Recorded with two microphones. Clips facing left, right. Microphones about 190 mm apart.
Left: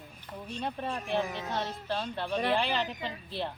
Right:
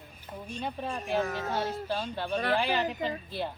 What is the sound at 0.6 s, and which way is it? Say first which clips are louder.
Speech: even; centre (ahead or behind).